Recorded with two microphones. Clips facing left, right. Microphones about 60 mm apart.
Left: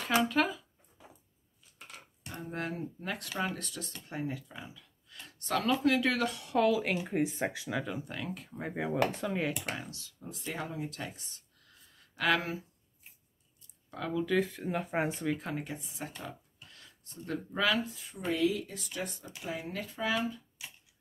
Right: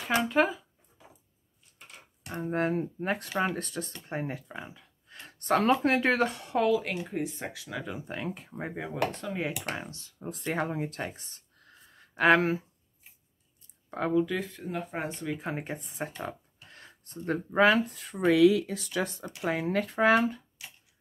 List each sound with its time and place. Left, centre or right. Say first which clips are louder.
0.1 s speech: right 3 dB; right
2.3 s speech: right 9 dB; right
6.6 s speech: right 1 dB; centre
7.1 s speech: left 3 dB; left
8.1 s speech: right 4 dB; right
8.7 s speech: left 2 dB; centre
9.8 s speech: right 3 dB; right
10.2 s speech: right 8 dB; right
13.8 s speech: right 7 dB; right
14.2 s speech: left 3 dB; centre
15.5 s speech: right 3 dB; right
17.8 s speech: right 9 dB; right
19.2 s speech: right 9 dB; right